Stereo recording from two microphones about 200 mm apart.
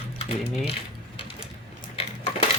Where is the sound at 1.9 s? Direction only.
30° left (ahead or behind).